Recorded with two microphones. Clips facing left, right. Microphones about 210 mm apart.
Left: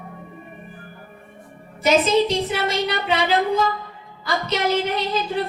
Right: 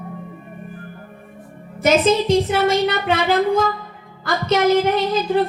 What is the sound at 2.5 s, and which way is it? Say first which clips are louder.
A woman's voice: right 6 dB; 50° right (ahead or behind).